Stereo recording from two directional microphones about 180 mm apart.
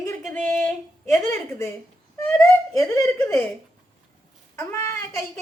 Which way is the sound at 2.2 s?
15° left (ahead or behind).